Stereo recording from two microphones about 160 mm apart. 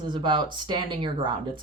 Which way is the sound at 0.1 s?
30° right (ahead or behind).